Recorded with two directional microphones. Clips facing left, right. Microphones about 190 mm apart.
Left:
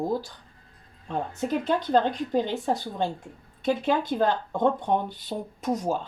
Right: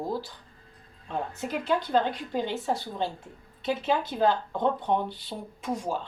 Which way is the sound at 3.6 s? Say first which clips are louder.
Left 3 dB; 50° left (ahead or behind).